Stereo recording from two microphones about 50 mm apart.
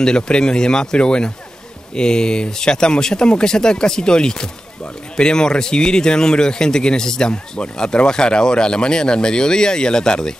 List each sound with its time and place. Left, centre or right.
0.0 s speech: centre